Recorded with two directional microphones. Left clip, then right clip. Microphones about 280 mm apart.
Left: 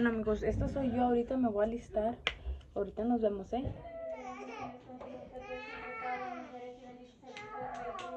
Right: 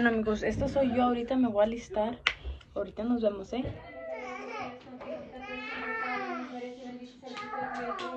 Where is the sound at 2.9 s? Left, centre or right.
Centre.